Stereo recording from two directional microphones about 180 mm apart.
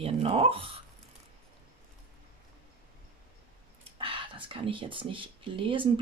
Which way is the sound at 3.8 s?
30° right (ahead or behind).